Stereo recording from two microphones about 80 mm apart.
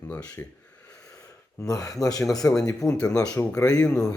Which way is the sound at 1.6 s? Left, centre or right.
Left.